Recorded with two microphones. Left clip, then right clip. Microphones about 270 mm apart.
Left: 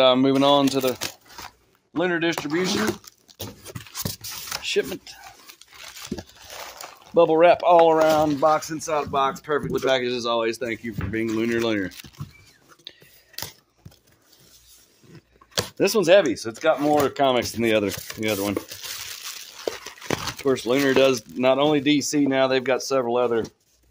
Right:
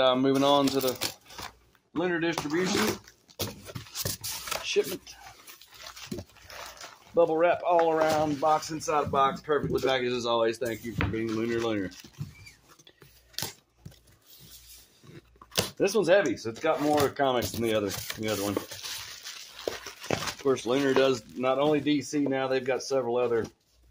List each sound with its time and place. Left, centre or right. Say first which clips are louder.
0.0 s speech: left 6 dB; left
2.0 s speech: left 5 dB; left
3.9 s a sound: left 2 dB; centre
4.6 s speech: left 4 dB; left
7.2 s speech: left 8 dB; left
15.8 s speech: left 6 dB; left
20.4 s speech: left 5 dB; left
21.4 s speech: left 6 dB; left